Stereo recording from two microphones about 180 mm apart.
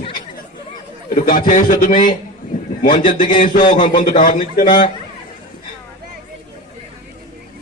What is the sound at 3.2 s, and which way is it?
Speech, 50° left (ahead or behind).